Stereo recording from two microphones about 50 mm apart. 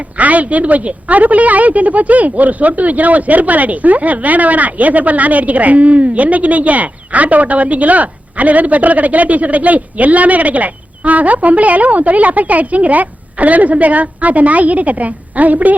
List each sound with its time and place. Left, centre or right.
0.2 s a woman's voice: right